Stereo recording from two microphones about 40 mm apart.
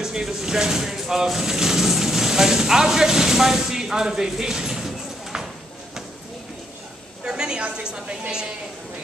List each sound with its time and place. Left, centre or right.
0.0 s speech: centre
7.2 s a sound: centre
7.8 s a woman's voice: right